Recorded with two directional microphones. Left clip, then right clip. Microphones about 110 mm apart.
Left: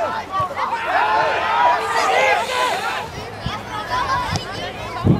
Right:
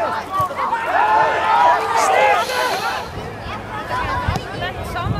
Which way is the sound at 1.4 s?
25° right (ahead or behind).